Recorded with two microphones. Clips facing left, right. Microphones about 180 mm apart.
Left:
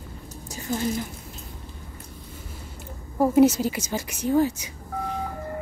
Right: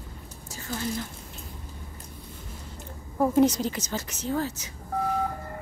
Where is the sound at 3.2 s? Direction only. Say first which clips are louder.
Left 4 dB; 10° left (ahead or behind).